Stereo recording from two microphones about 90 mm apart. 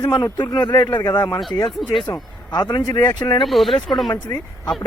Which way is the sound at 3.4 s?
Centre (ahead or behind).